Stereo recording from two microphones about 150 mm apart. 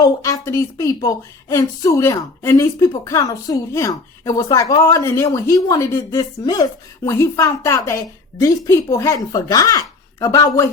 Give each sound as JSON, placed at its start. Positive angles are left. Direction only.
{"t": 0.0, "sound": "speech", "side_deg": 20}